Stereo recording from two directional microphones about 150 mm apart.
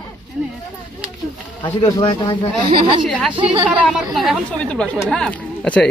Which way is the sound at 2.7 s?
35° right (ahead or behind).